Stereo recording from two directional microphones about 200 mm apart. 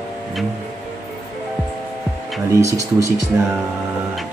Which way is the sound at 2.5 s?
15° right (ahead or behind).